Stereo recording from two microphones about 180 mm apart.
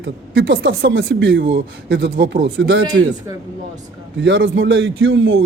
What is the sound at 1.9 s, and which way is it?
A man's voice, 80° right.